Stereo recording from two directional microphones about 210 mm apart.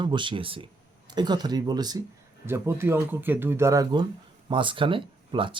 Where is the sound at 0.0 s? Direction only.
20° right (ahead or behind).